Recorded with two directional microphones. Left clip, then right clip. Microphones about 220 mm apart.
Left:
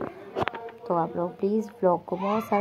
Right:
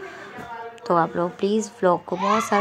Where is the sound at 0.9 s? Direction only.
55° right (ahead or behind).